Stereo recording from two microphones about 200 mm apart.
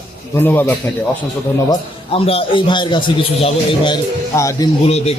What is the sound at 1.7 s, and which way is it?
A man's voice, 30° left (ahead or behind).